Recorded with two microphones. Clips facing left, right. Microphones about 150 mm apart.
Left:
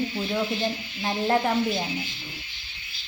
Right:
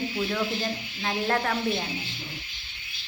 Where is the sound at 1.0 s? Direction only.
20° left (ahead or behind).